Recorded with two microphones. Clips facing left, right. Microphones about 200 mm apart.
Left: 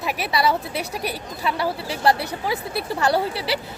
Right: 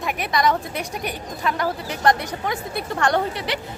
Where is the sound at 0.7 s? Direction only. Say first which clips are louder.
Left 1 dB; 35° left (ahead or behind).